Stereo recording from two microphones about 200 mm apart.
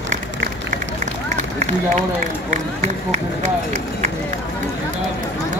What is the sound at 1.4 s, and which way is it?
Run, 35° right (ahead or behind).